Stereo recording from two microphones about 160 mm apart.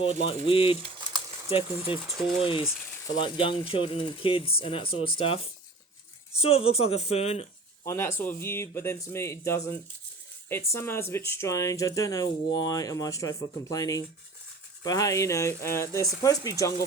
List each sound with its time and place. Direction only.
0.0 s speech: 35° left (ahead or behind)
2.4 s speech: 35° left (ahead or behind)
7.9 s speech: 15° left (ahead or behind)